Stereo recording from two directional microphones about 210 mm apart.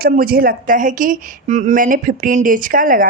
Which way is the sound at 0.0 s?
45° right (ahead or behind).